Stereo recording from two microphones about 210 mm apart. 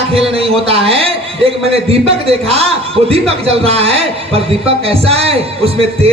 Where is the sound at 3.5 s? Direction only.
30° right (ahead or behind).